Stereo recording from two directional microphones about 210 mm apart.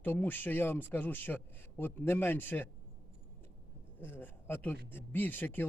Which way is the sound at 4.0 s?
10° left (ahead or behind).